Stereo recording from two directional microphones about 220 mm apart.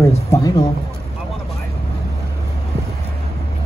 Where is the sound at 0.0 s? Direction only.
15° left (ahead or behind).